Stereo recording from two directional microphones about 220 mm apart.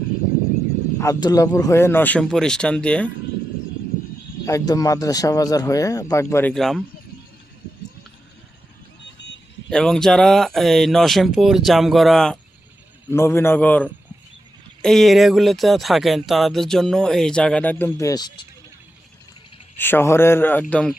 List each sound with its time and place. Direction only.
0.9 s speech: 15° left (ahead or behind)
4.4 s speech: 15° left (ahead or behind)
9.6 s speech: 5° left (ahead or behind)
19.7 s speech: 10° left (ahead or behind)